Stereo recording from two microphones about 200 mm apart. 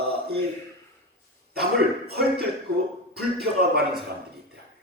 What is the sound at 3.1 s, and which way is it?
Speech, 50° right (ahead or behind).